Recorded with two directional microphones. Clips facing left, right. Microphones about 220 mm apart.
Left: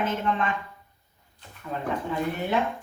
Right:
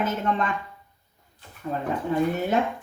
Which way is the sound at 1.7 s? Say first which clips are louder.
Right 2 dB; 40° right (ahead or behind).